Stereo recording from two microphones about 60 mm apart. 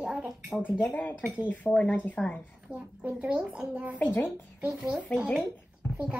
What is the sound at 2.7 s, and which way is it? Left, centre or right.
A child's voice, centre.